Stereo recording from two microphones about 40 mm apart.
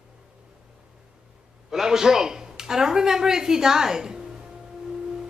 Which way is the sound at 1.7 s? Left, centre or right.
Centre.